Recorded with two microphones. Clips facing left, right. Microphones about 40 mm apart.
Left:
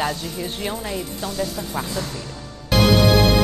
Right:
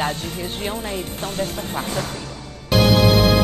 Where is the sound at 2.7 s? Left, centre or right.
Centre.